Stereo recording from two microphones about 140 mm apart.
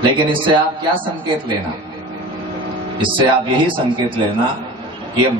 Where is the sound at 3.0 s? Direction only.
35° right (ahead or behind).